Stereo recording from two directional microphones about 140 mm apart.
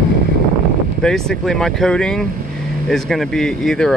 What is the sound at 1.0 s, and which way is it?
Speech, 5° left (ahead or behind).